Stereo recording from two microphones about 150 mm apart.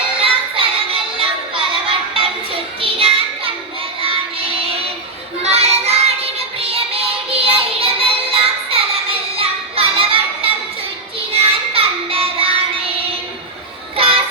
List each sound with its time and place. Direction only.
0.2 s music: 35° right (ahead or behind)
5.4 s music: 45° right (ahead or behind)
13.9 s child singing: 40° right (ahead or behind)